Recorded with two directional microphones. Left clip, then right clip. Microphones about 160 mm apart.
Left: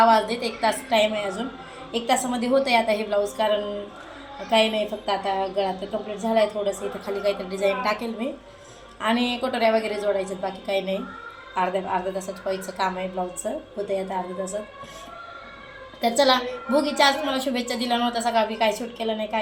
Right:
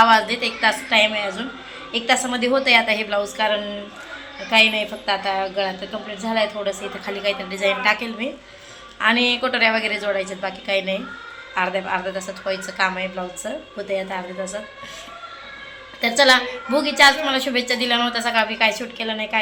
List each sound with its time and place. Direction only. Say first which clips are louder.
0.0 s a woman's voice: right 3 dB; 5° left (ahead or behind)
16.0 s a woman's voice: right 4 dB; 10° left (ahead or behind)